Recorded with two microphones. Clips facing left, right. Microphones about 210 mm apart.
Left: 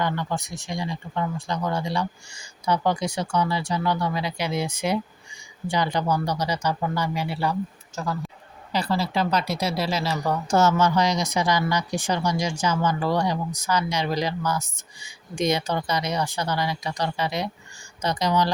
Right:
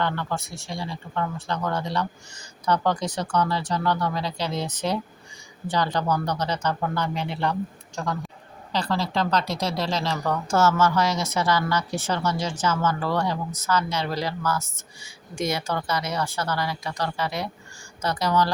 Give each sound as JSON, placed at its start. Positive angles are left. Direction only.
{"t": 0.0, "sound": "speech", "side_deg": 15}